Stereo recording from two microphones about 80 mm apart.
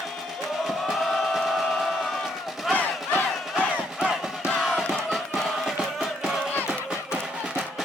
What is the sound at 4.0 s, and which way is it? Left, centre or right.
Music, centre.